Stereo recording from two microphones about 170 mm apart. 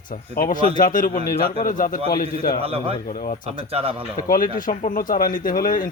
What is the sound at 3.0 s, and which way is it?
Speech, 60° left (ahead or behind).